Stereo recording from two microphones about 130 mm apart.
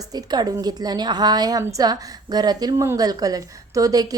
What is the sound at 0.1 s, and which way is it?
Speech, 30° right (ahead or behind).